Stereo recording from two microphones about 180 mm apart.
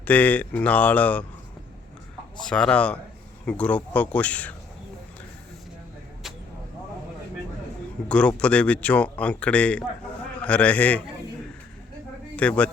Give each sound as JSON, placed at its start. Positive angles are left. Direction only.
{"t": 0.0, "sound": "speech", "side_deg": 10}
{"t": 2.4, "sound": "speech", "side_deg": 5}
{"t": 8.0, "sound": "speech", "side_deg": 5}
{"t": 12.4, "sound": "speech", "side_deg": 5}